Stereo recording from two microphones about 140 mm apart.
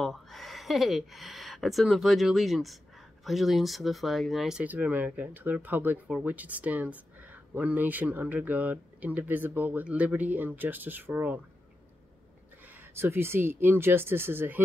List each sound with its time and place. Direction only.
0.0 s speech: centre (ahead or behind)
12.6 s speech: 15° right (ahead or behind)